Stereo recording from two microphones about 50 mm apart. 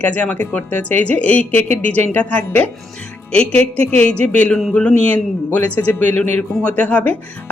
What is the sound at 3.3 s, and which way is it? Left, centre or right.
A woman's voice, left.